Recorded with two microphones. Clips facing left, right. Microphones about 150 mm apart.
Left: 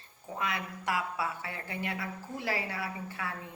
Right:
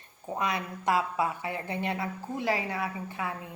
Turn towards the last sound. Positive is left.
turn(degrees=-20)  # may be behind; listen again after turning